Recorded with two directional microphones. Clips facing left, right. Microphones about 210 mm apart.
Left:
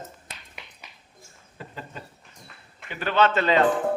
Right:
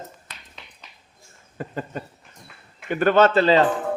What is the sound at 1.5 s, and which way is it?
A man's voice, 50° right (ahead or behind).